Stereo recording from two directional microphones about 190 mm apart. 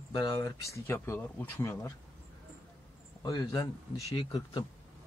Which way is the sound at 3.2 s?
20° left (ahead or behind).